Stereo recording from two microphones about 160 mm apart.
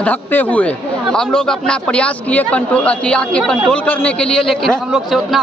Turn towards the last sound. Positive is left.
turn(degrees=0)  # may be behind; listen again after turning